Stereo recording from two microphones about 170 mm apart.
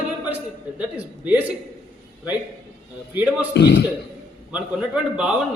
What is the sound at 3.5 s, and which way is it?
Speech, 75° left (ahead or behind).